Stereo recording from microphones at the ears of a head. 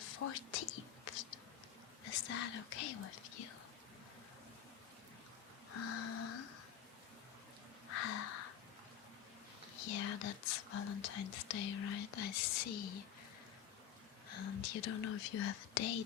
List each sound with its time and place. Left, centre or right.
0.0 s whispering: left
2.0 s speech: left
5.7 s a sound: left
7.9 s a sound: left
9.7 s speech: left
14.3 s speech: left